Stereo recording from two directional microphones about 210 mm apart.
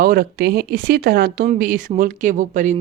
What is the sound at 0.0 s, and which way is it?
Speech, 45° right (ahead or behind).